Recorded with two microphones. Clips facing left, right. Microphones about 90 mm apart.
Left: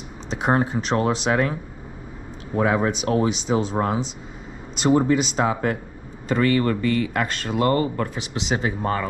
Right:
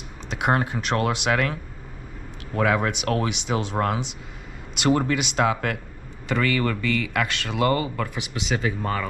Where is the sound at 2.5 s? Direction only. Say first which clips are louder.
Left 2 dB; 15° left (ahead or behind).